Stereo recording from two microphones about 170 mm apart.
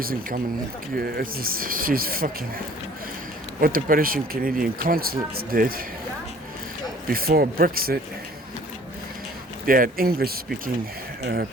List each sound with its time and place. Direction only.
0.0 s speech: 55° right (ahead or behind)
3.6 s speech: 55° right (ahead or behind)
7.1 s speech: 60° right (ahead or behind)
9.6 s speech: 55° right (ahead or behind)